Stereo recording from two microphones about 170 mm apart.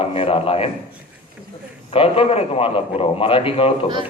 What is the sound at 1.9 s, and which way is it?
A man's voice, 35° left (ahead or behind).